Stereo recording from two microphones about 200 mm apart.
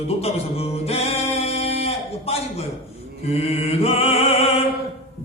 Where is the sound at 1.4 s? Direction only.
30° left (ahead or behind).